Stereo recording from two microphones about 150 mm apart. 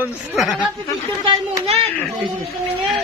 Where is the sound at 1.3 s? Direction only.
45° right (ahead or behind).